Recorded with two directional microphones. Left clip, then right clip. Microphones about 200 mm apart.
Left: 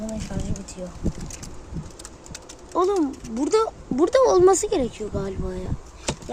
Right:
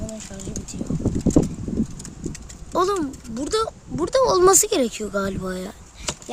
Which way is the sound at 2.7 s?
40° right (ahead or behind).